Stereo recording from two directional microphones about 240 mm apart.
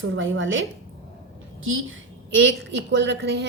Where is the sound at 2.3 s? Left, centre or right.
Right.